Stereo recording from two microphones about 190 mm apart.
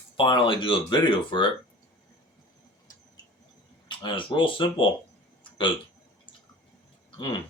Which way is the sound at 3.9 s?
25° left (ahead or behind).